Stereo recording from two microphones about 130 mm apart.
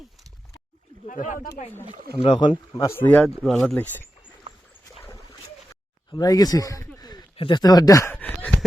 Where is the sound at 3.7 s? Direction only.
15° left (ahead or behind).